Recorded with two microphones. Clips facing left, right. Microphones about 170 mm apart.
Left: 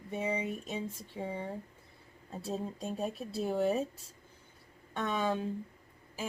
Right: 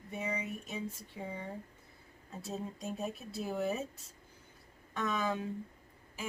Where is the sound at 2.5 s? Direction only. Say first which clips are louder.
Left 3 dB; 30° left (ahead or behind).